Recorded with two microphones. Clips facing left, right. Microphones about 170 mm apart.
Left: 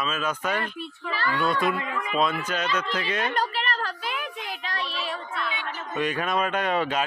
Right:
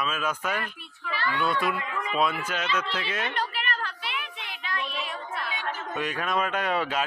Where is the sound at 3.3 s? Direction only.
40° left (ahead or behind).